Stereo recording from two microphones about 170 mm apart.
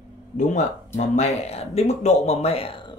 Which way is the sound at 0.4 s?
45° left (ahead or behind).